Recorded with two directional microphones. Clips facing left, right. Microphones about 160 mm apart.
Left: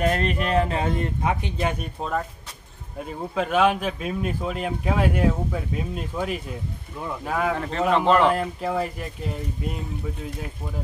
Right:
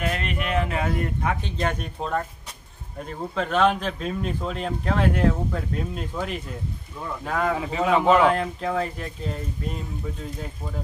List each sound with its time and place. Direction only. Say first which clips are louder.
0.0 s speech: left 5 dB; 40° left (ahead or behind)
1.4 s speech: left 1 dB; 10° left (ahead or behind)
7.5 s speech: right 1 dB; 5° right (ahead or behind)
8.3 s speech: even; 5° left (ahead or behind)